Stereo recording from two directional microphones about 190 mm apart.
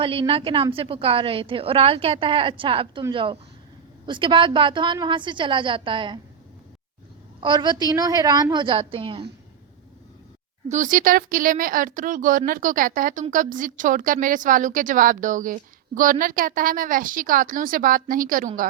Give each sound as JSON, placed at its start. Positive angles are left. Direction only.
{"t": 0.0, "sound": "a woman's voice", "side_deg": -30}
{"t": 7.4, "sound": "a woman's voice", "side_deg": -25}
{"t": 10.7, "sound": "a woman's voice", "side_deg": -40}